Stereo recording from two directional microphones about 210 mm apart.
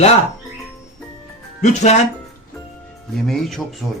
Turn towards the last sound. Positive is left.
turn(degrees=0)  # may be behind; listen again after turning